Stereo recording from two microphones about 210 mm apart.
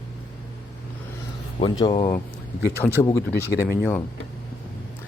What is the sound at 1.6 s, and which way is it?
Speech, 20° left (ahead or behind).